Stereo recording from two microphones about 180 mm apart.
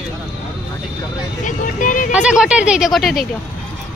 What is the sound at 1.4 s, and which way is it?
Vehicle, 45° left (ahead or behind).